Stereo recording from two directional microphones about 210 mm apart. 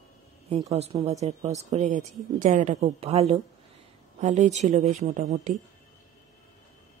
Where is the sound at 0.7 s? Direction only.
30° right (ahead or behind).